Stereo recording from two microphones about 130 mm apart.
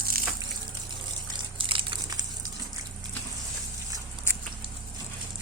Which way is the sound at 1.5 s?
40° right (ahead or behind).